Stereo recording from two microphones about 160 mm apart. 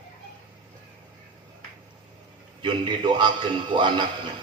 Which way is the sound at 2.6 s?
30° right (ahead or behind).